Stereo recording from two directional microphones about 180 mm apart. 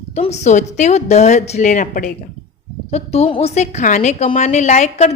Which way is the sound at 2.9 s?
35° left (ahead or behind).